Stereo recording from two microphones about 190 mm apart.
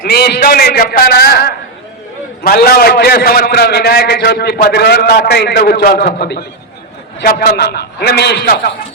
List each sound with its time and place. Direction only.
0.0 s a man's voice: 55° left (ahead or behind)